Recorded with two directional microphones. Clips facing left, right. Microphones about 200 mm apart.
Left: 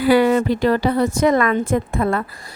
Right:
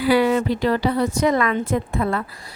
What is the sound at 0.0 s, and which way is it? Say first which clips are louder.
A woman's voice: left 3 dB; 50° left (ahead or behind).